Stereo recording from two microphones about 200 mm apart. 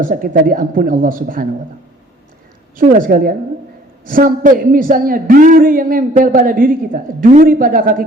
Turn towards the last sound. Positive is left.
turn(degrees=-45)  # may be behind; listen again after turning